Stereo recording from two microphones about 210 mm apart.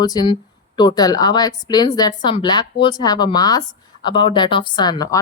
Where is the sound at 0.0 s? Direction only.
20° left (ahead or behind).